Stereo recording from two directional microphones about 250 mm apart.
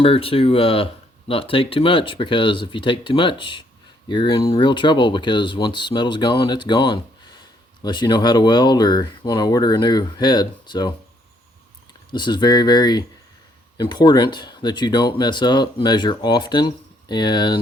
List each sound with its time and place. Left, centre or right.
0.0 s speech: left
12.1 s speech: centre